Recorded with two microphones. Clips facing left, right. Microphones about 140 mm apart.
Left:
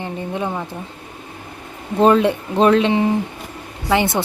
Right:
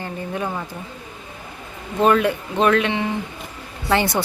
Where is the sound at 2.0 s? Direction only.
25° left (ahead or behind).